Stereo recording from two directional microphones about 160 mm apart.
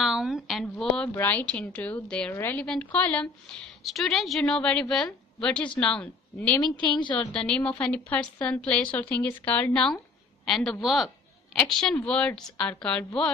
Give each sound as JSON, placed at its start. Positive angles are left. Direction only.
{"t": 0.0, "sound": "a woman's voice", "side_deg": 0}
{"t": 6.6, "sound": "a woman's voice", "side_deg": 30}
{"t": 7.3, "sound": "a woman's voice", "side_deg": 5}